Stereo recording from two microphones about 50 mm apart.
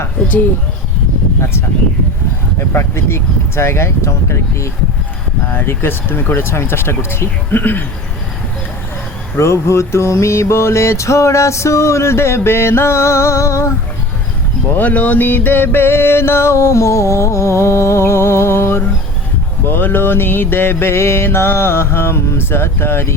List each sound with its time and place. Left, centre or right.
2.6 s music: left
5.5 s mantra: left
9.4 s music: left
14.8 s music: left
19.6 s mantra: left